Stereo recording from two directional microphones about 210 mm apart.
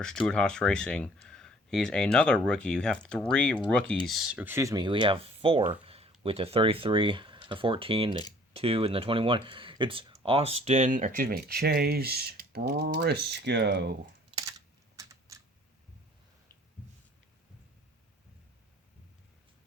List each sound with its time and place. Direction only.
0.0 s speech: 5° left (ahead or behind); by 13.9 s 55° right (ahead or behind)
14.9 s typing: 15° right (ahead or behind)